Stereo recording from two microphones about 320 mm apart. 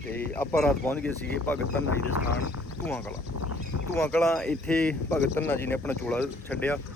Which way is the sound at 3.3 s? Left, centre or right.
Left.